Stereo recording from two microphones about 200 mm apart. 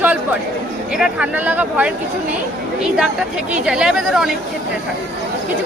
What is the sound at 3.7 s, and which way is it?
Speech, 5° right (ahead or behind).